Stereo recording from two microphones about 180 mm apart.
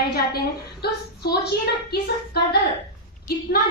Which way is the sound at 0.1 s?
60° left (ahead or behind).